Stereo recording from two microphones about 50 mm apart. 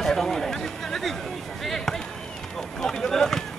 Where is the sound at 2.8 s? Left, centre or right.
Centre.